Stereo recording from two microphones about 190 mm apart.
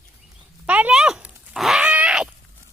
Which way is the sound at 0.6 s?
5° right (ahead or behind).